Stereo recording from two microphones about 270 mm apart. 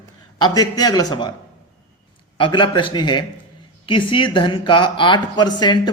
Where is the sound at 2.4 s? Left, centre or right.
Centre.